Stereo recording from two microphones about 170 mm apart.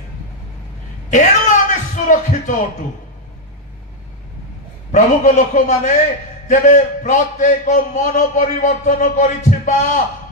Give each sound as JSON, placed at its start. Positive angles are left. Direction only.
{"t": 1.1, "sound": "music", "side_deg": 45}
{"t": 4.9, "sound": "a man's voice", "side_deg": 45}